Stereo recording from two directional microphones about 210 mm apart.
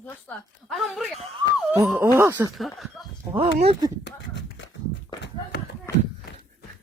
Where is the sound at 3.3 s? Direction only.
25° right (ahead or behind).